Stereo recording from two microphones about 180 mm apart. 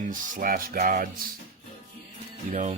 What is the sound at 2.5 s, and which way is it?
Speech, 40° right (ahead or behind).